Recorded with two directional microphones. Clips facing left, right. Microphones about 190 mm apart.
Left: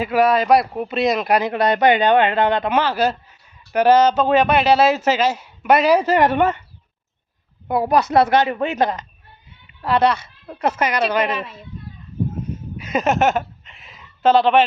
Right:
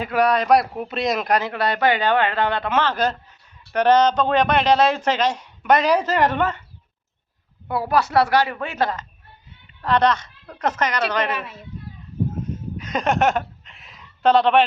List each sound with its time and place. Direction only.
0.0 s speech: 5° left (ahead or behind)
1.4 s a man's voice: 20° left (ahead or behind)
7.7 s a man's voice: 20° left (ahead or behind)
9.8 s speech: 10° left (ahead or behind)
12.7 s a sound: 10° left (ahead or behind)